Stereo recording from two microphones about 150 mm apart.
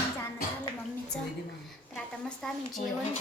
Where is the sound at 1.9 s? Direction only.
5° left (ahead or behind).